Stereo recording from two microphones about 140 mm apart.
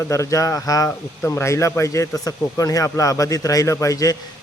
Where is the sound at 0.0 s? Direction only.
20° left (ahead or behind).